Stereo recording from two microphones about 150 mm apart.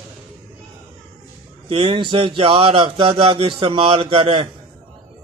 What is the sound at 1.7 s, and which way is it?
A man's voice, 40° right (ahead or behind).